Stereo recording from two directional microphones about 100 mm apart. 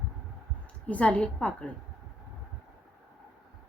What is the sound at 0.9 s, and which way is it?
Speech, 10° left (ahead or behind).